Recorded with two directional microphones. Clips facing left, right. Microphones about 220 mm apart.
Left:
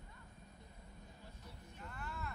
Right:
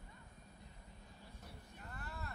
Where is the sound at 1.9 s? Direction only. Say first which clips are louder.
Left 2 dB; 35° right (ahead or behind).